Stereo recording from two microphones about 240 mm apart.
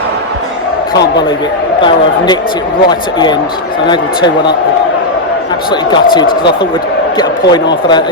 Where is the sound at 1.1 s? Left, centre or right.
Centre.